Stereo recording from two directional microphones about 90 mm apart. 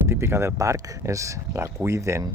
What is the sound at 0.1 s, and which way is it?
Speech, 30° right (ahead or behind).